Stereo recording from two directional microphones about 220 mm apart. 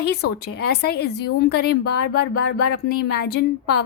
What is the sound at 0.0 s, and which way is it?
A woman's voice, 50° left (ahead or behind).